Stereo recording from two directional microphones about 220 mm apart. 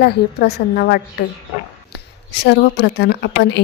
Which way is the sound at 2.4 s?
50° left (ahead or behind).